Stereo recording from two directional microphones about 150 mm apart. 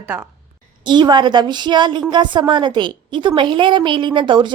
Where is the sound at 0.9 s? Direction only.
30° right (ahead or behind).